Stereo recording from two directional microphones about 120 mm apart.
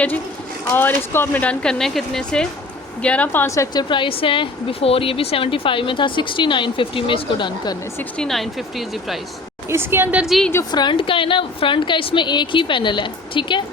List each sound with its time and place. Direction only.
0.7 s a woman's voice: 15° left (ahead or behind)
3.8 s a woman's voice: 40° left (ahead or behind)
8.2 s speech: centre (ahead or behind)
9.6 s a woman's voice: 20° right (ahead or behind)
10.2 s speech: centre (ahead or behind)
10.7 s a woman's voice: 40° left (ahead or behind)